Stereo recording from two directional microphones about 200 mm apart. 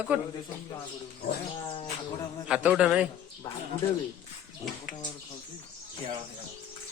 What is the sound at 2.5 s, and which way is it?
Speech, 5° right (ahead or behind).